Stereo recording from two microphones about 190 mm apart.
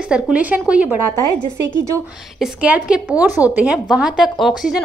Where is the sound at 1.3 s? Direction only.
25° left (ahead or behind).